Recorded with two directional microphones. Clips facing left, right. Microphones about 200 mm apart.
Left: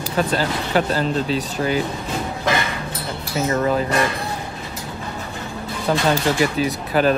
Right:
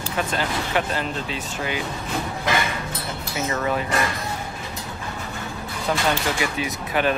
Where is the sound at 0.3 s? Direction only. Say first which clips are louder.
Left 4 dB; 35° left (ahead or behind).